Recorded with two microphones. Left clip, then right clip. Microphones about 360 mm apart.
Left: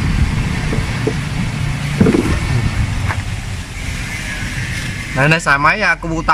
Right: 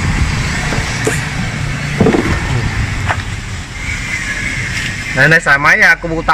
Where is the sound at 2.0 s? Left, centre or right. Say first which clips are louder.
Right 3 dB; right.